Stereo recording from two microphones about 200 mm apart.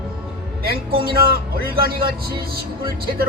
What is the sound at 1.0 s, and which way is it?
Speech, 50° right (ahead or behind).